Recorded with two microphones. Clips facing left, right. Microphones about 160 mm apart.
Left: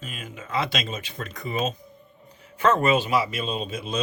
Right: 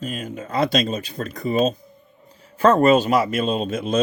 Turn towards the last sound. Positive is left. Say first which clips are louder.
# right 7 dB
turn(degrees=-50)  # may be behind; listen again after turning